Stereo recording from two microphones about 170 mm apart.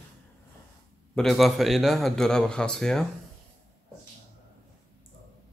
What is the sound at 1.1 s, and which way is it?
Speech, centre (ahead or behind).